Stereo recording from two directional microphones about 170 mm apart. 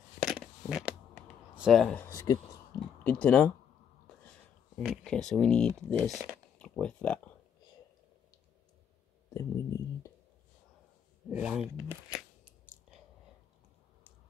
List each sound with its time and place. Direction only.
0.2 s a sound: centre (ahead or behind)
1.6 s speech: centre (ahead or behind)
2.0 s speech: 20° left (ahead or behind)
3.0 s speech: 5° left (ahead or behind)
4.7 s speech: 5° left (ahead or behind)
9.3 s speech: 15° left (ahead or behind)
11.2 s speech: 5° right (ahead or behind)